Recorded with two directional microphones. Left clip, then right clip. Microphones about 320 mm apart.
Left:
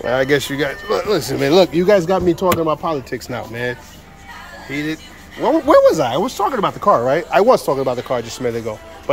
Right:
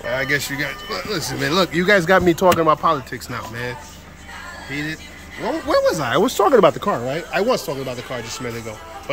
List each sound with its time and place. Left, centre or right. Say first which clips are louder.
0.1 s speech: left 4 dB; centre
2.4 s speech: right 2 dB; right
2.8 s speech: right 2 dB; centre
6.2 s speech: right 4 dB; centre
6.8 s speech: left 8 dB; centre